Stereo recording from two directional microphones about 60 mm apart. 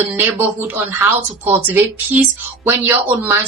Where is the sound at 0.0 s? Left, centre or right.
Right.